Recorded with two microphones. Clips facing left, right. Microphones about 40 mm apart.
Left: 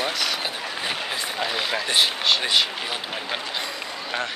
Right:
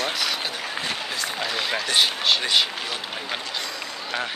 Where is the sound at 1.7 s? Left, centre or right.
Centre.